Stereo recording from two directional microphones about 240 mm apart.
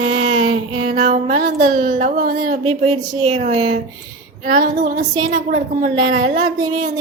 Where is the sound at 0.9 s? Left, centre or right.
Right.